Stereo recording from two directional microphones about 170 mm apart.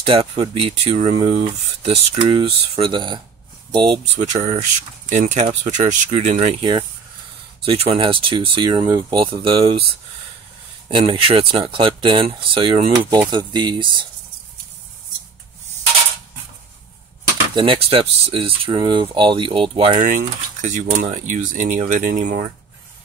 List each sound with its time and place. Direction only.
0.0 s speech: 30° right (ahead or behind)
4.1 s speech: 40° right (ahead or behind)
6.6 s speech: 25° right (ahead or behind)
7.6 s speech: 35° right (ahead or behind)
10.9 s speech: 30° right (ahead or behind)
17.6 s speech: 35° right (ahead or behind)
20.6 s speech: 45° right (ahead or behind)